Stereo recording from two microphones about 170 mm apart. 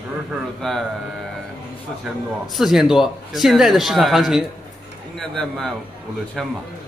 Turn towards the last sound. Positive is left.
turn(degrees=0)  # may be behind; listen again after turning